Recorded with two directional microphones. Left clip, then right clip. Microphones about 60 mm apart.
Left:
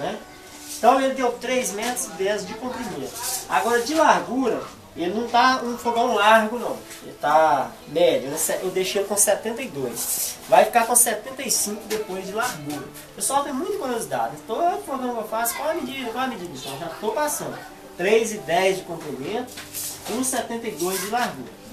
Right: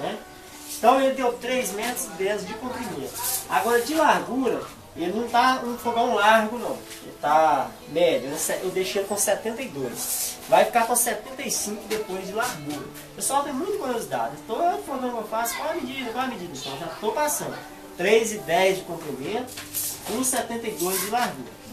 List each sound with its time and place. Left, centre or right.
0.7 s a woman's voice: centre
12.1 s a woman's voice: centre
20.2 s a woman's voice: centre